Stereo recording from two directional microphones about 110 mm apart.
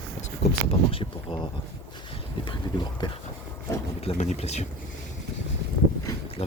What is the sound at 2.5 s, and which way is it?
Speech, 45° left (ahead or behind).